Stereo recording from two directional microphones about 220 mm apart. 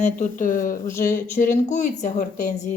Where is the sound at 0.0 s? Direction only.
35° left (ahead or behind).